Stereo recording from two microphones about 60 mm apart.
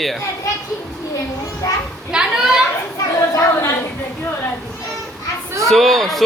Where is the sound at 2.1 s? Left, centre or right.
Centre.